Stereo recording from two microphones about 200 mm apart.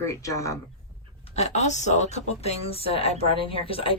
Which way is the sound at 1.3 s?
35° left (ahead or behind).